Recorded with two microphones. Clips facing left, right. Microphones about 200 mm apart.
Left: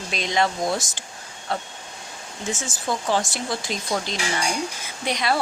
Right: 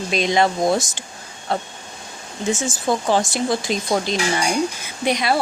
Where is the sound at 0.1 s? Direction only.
15° right (ahead or behind).